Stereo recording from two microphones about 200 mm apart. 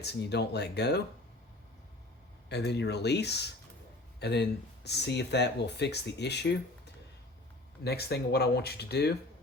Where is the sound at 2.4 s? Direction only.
55° left (ahead or behind).